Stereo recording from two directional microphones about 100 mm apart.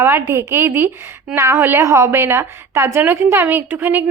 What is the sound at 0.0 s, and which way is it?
A woman's voice, 25° right (ahead or behind).